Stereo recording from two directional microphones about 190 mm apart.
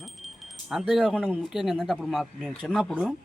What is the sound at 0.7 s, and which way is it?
Speech, centre (ahead or behind).